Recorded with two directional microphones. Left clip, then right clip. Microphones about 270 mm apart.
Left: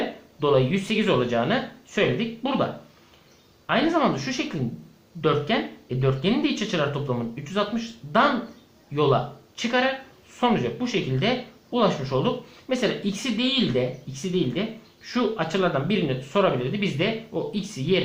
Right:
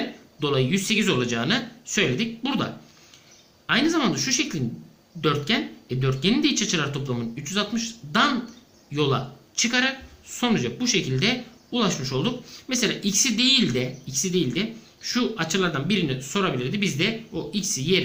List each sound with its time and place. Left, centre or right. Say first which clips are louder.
0.3 s speech: left 3 dB; centre
3.7 s speech: even; centre